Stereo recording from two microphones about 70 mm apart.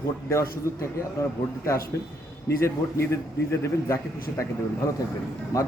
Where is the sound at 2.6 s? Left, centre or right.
Left.